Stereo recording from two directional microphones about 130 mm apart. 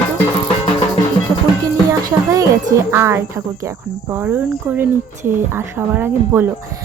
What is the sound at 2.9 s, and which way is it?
Cricket, 20° right (ahead or behind).